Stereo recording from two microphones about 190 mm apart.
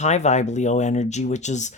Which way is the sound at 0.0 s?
35° left (ahead or behind).